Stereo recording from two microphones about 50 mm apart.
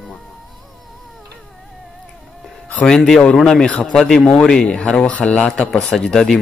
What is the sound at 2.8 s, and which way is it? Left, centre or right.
A man's voice, centre.